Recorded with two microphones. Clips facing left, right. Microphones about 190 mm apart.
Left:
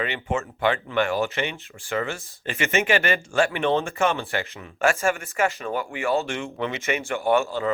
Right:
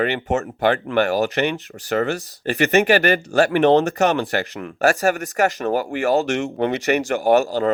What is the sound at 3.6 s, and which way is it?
Speech, 75° right (ahead or behind).